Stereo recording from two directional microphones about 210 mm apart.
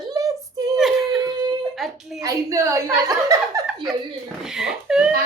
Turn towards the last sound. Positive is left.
turn(degrees=-5)  # may be behind; listen again after turning